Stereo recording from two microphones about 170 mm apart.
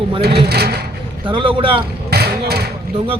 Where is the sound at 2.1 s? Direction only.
70° right (ahead or behind).